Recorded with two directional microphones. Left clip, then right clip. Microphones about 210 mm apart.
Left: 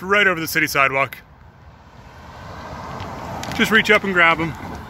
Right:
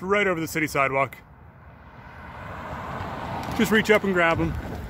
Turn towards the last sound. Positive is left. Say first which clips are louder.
# left 4 dB
turn(degrees=45)  # may be behind; listen again after turning